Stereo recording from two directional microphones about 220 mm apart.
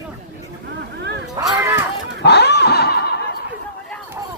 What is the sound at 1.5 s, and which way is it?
Cat, 10° right (ahead or behind).